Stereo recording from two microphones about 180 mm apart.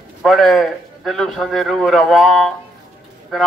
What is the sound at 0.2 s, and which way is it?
A man's voice, centre (ahead or behind).